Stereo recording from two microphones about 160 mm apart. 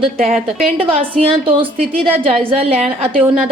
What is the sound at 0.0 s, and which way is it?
A woman's voice, 40° right (ahead or behind).